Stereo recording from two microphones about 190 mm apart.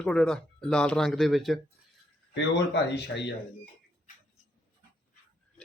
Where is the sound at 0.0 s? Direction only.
5° left (ahead or behind).